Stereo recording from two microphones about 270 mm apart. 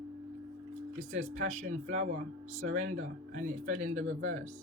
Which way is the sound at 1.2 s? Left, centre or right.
Right.